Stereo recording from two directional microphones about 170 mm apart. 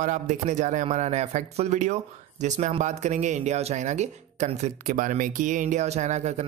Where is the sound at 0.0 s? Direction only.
45° right (ahead or behind).